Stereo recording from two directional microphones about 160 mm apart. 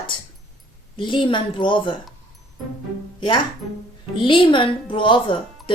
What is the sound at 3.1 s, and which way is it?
A woman's voice, 30° left (ahead or behind).